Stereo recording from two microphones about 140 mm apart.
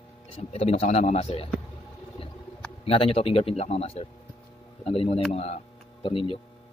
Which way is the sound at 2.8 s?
40° left (ahead or behind).